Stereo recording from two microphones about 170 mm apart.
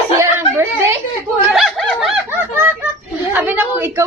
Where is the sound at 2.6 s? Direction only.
10° right (ahead or behind).